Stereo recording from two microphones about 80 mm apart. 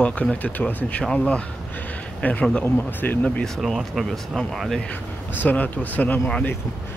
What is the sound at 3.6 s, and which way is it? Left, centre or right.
Speech, centre.